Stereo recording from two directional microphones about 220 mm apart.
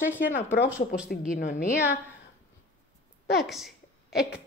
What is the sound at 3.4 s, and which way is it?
Speech, centre (ahead or behind).